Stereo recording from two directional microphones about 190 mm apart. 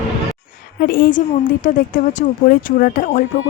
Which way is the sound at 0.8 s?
50° left (ahead or behind).